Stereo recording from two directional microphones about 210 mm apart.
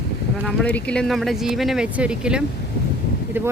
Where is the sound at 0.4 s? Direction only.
5° left (ahead or behind).